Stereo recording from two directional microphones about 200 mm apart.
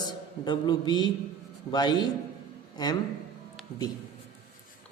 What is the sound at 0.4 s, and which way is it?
A man's voice, 20° left (ahead or behind).